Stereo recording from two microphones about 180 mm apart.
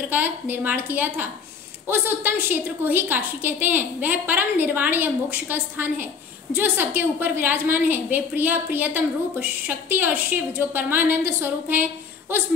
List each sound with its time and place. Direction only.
0.1 s a woman's voice: 10° right (ahead or behind)